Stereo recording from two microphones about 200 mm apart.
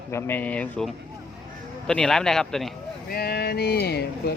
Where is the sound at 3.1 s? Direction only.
50° left (ahead or behind).